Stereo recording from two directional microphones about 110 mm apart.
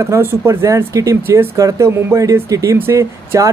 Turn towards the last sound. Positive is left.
turn(degrees=-25)  # may be behind; listen again after turning